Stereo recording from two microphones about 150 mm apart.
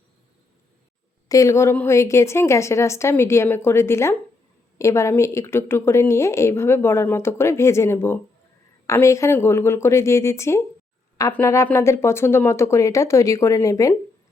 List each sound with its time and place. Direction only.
1.3 s a woman's voice: 20° left (ahead or behind)